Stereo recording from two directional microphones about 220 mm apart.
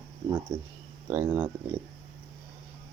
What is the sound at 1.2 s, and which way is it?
Speech, 15° right (ahead or behind).